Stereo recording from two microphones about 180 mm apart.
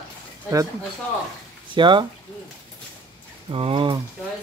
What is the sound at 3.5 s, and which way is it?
Speech, 30° right (ahead or behind).